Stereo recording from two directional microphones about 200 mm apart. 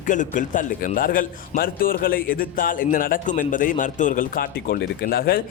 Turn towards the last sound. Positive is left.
turn(degrees=50)  # may be behind; listen again after turning